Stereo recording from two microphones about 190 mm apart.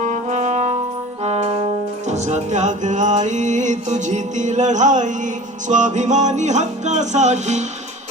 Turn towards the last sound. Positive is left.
turn(degrees=-35)  # may be behind; listen again after turning